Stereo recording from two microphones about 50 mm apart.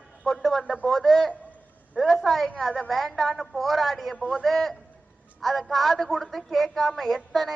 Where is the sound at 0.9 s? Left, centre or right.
Centre.